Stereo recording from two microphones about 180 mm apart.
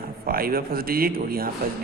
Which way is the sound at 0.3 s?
55° right (ahead or behind).